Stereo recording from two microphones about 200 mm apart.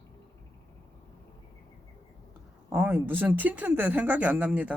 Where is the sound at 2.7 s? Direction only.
10° right (ahead or behind).